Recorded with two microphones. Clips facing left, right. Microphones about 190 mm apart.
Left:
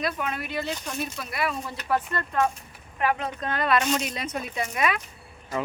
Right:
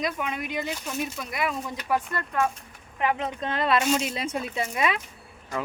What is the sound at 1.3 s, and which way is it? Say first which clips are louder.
Speech: left 1 dB; 15° right (ahead or behind).